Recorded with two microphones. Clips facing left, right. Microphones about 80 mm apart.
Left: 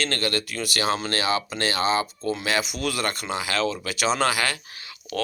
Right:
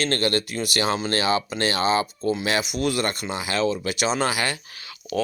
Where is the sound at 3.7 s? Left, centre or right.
Centre.